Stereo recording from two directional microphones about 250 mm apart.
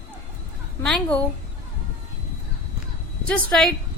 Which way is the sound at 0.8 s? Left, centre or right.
Centre.